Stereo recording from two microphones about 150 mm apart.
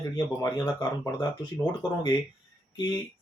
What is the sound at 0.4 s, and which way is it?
Speech, 25° left (ahead or behind).